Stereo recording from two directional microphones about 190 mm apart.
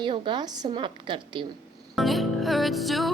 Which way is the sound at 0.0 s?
25° right (ahead or behind).